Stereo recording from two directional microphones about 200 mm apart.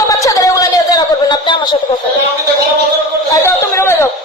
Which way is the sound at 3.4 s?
10° left (ahead or behind).